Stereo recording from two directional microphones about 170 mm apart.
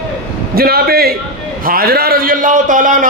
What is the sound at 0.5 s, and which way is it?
A man's voice, 65° right (ahead or behind).